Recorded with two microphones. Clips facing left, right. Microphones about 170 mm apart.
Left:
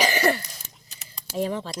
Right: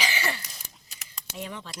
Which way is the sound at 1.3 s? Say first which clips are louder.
Left 11 dB; 35° left (ahead or behind).